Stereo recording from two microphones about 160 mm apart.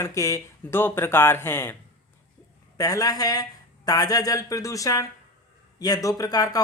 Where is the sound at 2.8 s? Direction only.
20° left (ahead or behind).